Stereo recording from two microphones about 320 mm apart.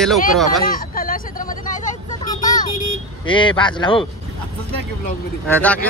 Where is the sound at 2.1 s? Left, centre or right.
Centre.